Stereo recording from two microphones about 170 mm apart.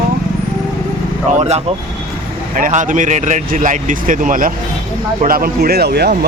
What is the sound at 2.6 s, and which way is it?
Speech, 50° right (ahead or behind).